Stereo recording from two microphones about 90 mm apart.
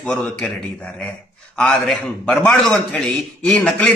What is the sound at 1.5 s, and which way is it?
A man's voice, 15° left (ahead or behind).